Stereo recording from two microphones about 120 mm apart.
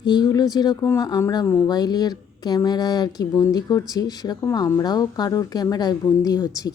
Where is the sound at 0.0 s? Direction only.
35° left (ahead or behind).